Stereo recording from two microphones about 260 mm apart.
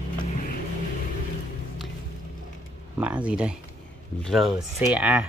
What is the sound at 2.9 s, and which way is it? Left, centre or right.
Speech, centre.